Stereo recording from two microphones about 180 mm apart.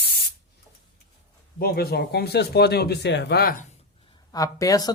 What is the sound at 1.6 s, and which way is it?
Speech, 60° left (ahead or behind).